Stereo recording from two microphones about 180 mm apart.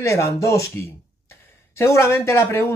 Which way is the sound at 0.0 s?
15° left (ahead or behind).